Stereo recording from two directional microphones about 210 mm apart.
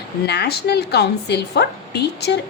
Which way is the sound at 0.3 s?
50° left (ahead or behind).